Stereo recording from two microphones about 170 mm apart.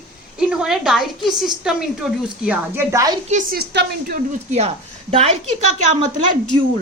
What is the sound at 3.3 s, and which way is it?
A woman's voice, 55° right (ahead or behind).